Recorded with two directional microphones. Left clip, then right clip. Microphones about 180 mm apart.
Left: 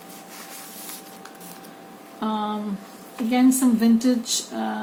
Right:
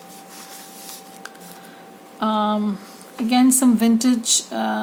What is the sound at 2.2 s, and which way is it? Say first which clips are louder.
Speech: right 6 dB; 50° right (ahead or behind).